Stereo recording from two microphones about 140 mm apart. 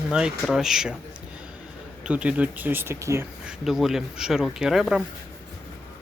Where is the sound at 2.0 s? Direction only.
10° right (ahead or behind).